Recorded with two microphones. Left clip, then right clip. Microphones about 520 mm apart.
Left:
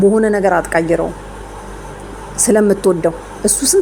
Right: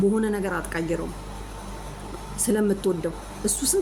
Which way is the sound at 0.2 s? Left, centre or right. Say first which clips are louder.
Left 14 dB; right.